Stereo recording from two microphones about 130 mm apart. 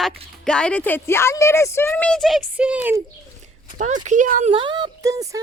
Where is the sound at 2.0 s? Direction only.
5° left (ahead or behind).